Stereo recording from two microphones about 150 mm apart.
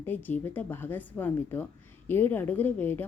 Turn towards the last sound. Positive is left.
turn(degrees=15)  # may be behind; listen again after turning